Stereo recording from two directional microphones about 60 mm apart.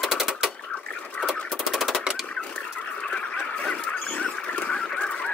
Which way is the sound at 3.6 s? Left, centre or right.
Centre.